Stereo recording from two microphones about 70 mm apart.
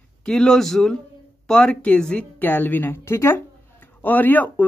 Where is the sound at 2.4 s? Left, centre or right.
Left.